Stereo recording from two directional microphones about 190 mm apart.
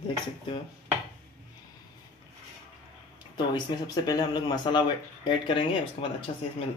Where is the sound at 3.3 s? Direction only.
20° left (ahead or behind).